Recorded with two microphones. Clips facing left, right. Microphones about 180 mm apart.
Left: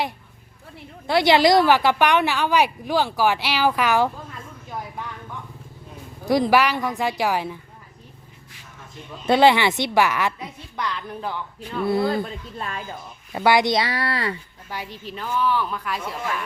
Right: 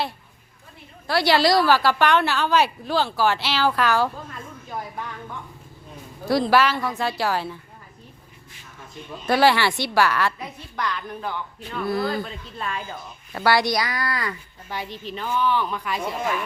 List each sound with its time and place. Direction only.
1.0 s a woman's voice: 20° left (ahead or behind)
6.2 s a woman's voice: 15° left (ahead or behind)
9.2 s a woman's voice: 20° left (ahead or behind)
13.3 s a woman's voice: 20° left (ahead or behind)
14.7 s a woman's voice: 10° left (ahead or behind)